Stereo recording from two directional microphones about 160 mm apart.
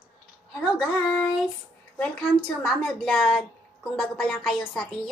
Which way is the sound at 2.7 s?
5° left (ahead or behind).